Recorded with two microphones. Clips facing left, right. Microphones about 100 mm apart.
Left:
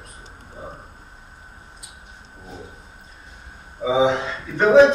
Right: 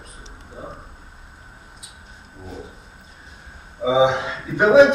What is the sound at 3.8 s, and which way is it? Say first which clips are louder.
Speech: right 1 dB; 15° right (ahead or behind).